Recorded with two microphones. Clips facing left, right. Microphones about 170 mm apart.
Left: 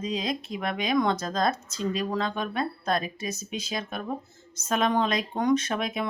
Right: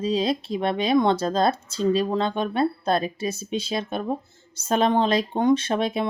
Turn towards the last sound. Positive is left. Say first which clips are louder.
# right 5 dB
turn(degrees=-30)  # may be behind; listen again after turning